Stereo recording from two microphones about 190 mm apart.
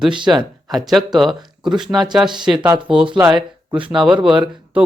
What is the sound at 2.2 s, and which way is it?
Speech, 25° right (ahead or behind).